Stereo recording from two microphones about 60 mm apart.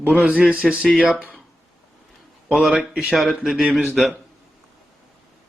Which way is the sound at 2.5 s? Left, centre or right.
Centre.